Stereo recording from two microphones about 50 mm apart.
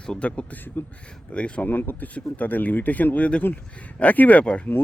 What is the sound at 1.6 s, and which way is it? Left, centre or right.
Speech, left.